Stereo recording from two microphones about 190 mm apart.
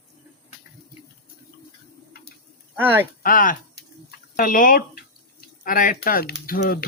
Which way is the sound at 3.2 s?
45° left (ahead or behind).